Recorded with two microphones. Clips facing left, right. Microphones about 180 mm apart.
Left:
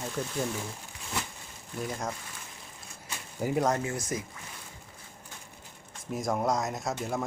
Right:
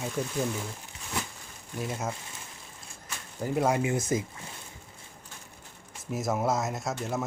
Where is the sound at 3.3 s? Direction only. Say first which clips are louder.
Left 1 dB; 10° left (ahead or behind).